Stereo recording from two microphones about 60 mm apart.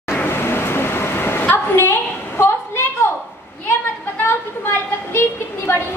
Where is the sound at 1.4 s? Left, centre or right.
Left.